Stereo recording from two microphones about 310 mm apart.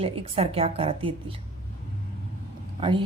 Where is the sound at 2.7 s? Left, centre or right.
Centre.